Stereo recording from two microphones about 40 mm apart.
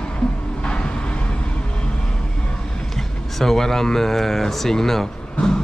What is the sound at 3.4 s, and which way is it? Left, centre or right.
Speech, centre.